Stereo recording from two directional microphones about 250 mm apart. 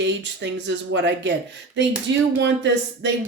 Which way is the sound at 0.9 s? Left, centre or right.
Right.